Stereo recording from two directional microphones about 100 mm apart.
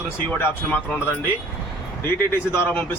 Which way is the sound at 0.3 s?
20° left (ahead or behind).